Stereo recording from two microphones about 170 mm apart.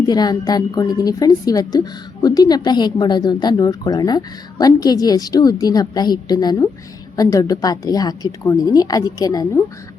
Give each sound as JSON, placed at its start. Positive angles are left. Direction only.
{"t": 0.0, "sound": "a woman's voice", "side_deg": 25}